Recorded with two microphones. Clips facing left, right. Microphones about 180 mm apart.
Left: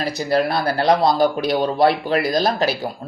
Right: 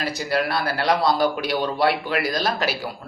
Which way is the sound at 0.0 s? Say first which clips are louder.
Left 4 dB; 35° left (ahead or behind).